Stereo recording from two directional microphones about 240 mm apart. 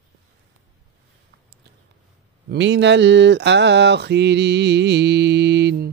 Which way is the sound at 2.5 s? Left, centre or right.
Right.